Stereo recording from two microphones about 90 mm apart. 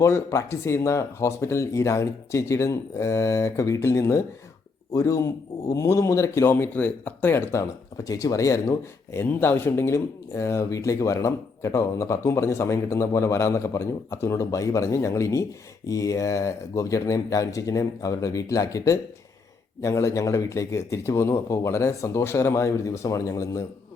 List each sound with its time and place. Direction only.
0.0 s speech: 30° left (ahead or behind)
8.0 s speech: 40° left (ahead or behind)
9.2 s speech: 20° left (ahead or behind); by 23.6 s 40° left (ahead or behind)